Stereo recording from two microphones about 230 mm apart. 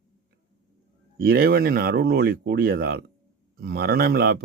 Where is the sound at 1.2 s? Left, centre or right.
Right.